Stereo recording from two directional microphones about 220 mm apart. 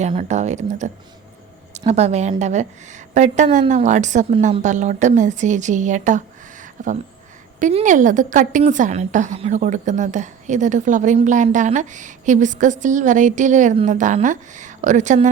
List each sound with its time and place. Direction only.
0.0 s a woman's voice: 30° right (ahead or behind)
1.9 s a woman's voice: 30° right (ahead or behind)